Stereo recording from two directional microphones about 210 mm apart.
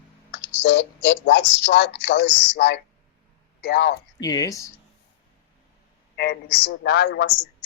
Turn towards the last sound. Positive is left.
turn(degrees=55)  # may be behind; listen again after turning